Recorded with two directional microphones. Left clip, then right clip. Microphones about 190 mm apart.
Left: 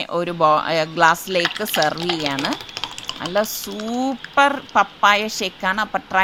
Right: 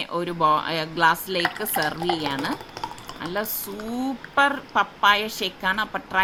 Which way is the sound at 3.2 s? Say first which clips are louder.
Left 7 dB; 30° left (ahead or behind).